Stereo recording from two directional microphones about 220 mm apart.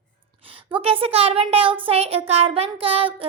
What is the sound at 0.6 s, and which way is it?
A woman's voice, 25° right (ahead or behind).